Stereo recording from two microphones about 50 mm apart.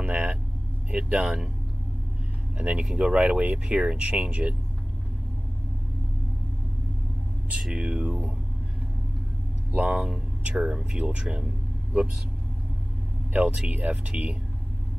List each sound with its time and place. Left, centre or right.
0.0 s vehicle: right
0.9 s speech: right
2.5 s speech: right
7.7 s speech: right
9.8 s speech: right
10.5 s speech: centre
13.3 s speech: right